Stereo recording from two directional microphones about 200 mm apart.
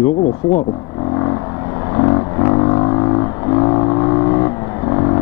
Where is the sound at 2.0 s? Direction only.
20° left (ahead or behind).